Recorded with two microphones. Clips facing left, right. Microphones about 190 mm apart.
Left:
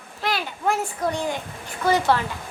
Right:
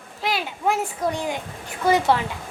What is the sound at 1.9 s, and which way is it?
Speech, 20° right (ahead or behind).